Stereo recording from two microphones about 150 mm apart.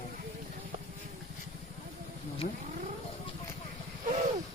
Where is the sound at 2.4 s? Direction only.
70° left (ahead or behind).